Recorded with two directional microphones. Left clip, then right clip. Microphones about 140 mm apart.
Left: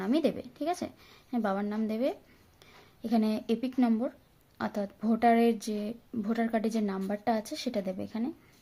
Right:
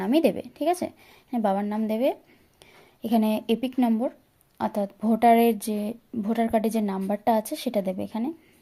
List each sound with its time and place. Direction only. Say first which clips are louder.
0.0 s speech: right 7 dB; 25° right (ahead or behind)